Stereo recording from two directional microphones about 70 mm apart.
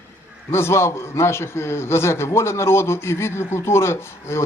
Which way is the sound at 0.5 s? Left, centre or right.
Left.